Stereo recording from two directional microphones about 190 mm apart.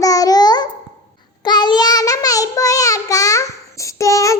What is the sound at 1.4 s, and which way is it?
Child singing, 25° left (ahead or behind).